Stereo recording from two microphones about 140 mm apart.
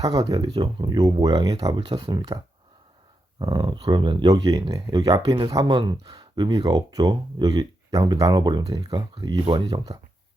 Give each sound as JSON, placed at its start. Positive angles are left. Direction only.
{"t": 0.3, "sound": "speech", "side_deg": -30}